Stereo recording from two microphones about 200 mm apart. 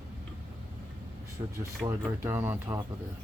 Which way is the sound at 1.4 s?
25° right (ahead or behind).